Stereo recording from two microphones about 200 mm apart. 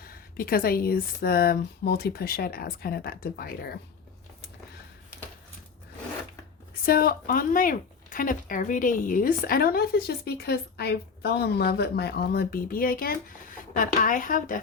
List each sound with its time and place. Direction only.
0.0 s speech: 45° left (ahead or behind)
6.8 s speech: 50° left (ahead or behind)